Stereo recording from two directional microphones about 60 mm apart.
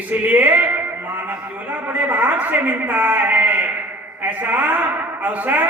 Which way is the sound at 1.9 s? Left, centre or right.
Right.